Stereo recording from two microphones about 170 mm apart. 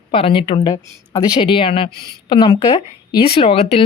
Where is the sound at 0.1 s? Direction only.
30° left (ahead or behind).